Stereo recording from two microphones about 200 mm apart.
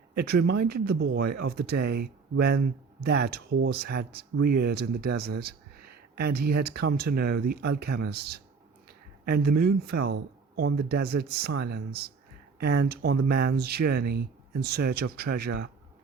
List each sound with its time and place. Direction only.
0.2 s speech: 55° right (ahead or behind)
9.4 s speech: 50° right (ahead or behind)